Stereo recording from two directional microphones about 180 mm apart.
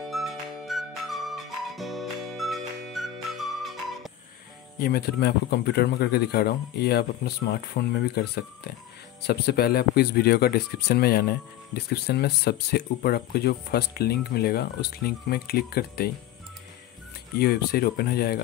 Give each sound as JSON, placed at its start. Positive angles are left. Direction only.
{"t": 0.1, "sound": "music", "side_deg": 0}
{"t": 4.7, "sound": "speech", "side_deg": 55}
{"t": 17.4, "sound": "speech", "side_deg": 60}